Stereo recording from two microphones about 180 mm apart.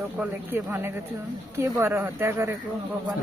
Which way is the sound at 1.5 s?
15° right (ahead or behind).